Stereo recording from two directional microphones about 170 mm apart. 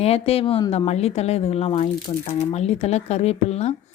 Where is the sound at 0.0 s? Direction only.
35° left (ahead or behind).